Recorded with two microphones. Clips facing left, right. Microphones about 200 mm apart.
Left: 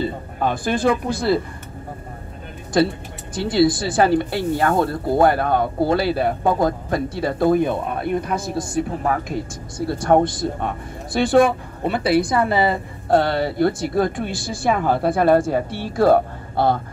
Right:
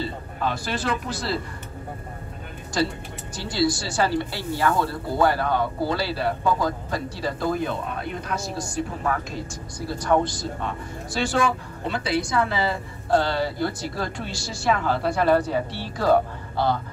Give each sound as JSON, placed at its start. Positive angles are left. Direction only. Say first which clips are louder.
{"t": 0.0, "sound": "speech", "louder": "left 5 dB", "side_deg": 50}
{"t": 3.3, "sound": "speech", "louder": "left 7 dB", "side_deg": 55}